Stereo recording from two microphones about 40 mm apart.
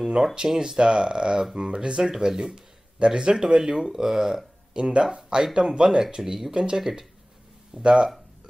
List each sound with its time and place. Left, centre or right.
0.1 s speech: centre
4.7 s speech: right
6.8 s speech: centre
7.7 s speech: right